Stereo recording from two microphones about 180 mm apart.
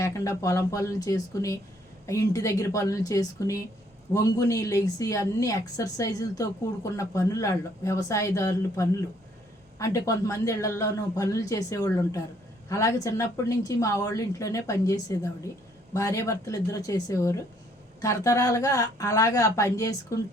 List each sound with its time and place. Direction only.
0.0 s a woman's voice: 15° left (ahead or behind)